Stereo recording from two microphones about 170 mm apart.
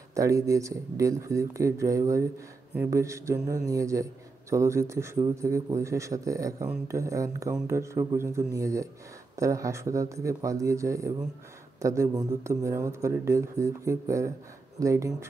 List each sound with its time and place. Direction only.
0.1 s a man's voice: 20° right (ahead or behind)